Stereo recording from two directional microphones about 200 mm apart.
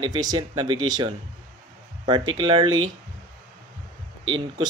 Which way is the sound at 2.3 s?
25° right (ahead or behind).